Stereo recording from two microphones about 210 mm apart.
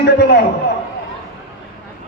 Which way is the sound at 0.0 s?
50° left (ahead or behind).